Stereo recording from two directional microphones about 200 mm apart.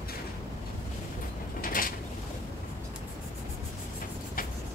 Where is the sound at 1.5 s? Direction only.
45° left (ahead or behind).